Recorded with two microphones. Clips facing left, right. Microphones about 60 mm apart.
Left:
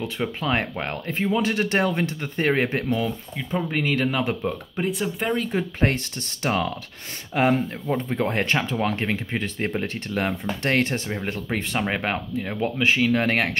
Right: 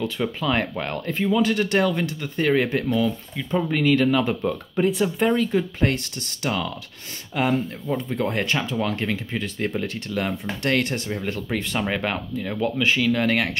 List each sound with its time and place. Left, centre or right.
0.0 s speech: centre
3.0 s speech: centre
4.4 s speech: centre
5.4 s speech: left